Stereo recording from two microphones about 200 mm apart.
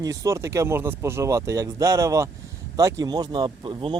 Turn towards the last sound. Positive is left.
turn(degrees=-25)  # may be behind; listen again after turning